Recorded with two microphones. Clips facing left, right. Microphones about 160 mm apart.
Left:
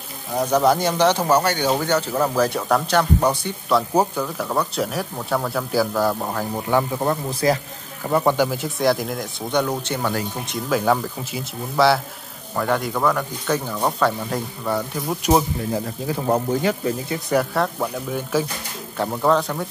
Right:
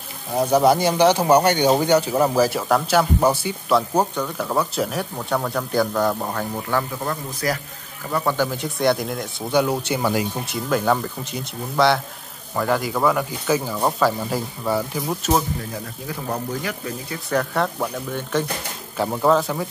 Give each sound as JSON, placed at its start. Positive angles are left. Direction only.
{"t": 0.4, "sound": "speech", "side_deg": -10}
{"t": 3.9, "sound": "speech", "side_deg": 10}
{"t": 6.5, "sound": "speech", "side_deg": 15}
{"t": 7.0, "sound": "a man's voice", "side_deg": 30}
{"t": 8.4, "sound": "speech", "side_deg": 5}
{"t": 15.2, "sound": "speech", "side_deg": 15}
{"t": 16.3, "sound": "a man's voice", "side_deg": 25}
{"t": 17.3, "sound": "speech", "side_deg": 5}